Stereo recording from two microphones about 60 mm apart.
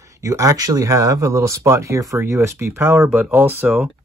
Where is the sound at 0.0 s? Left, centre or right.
Right.